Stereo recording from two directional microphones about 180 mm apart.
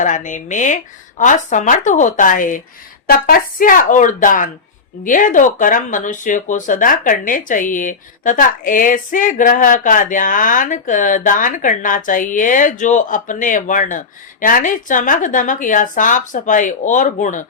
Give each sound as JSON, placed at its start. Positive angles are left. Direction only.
{"t": 0.0, "sound": "speech", "side_deg": 45}